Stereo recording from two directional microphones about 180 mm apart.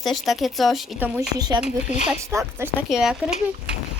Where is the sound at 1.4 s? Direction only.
20° right (ahead or behind).